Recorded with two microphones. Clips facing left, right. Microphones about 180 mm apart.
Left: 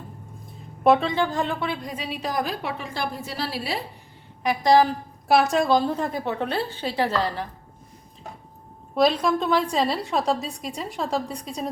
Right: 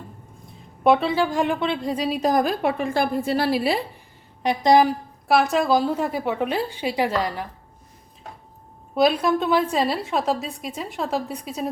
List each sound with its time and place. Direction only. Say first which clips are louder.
0.9 s a woman's voice: right 1 dB; 5° right (ahead or behind); by 3.8 s 55° right (ahead or behind)
4.4 s a woman's voice: right 1 dB; 20° right (ahead or behind)
5.3 s a woman's voice: even; centre (ahead or behind)
9.0 s a woman's voice: right 1 dB; 5° right (ahead or behind)